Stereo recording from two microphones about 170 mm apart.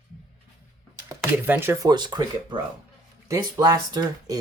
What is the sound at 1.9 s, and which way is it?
Speech, 25° right (ahead or behind).